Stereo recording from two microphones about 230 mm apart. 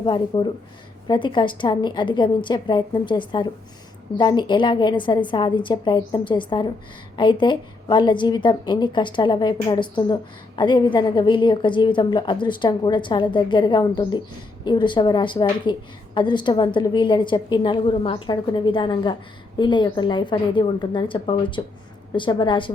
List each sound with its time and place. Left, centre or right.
0.0 s a woman's voice: left